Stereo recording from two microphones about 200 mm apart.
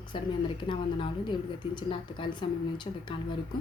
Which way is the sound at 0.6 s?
25° left (ahead or behind).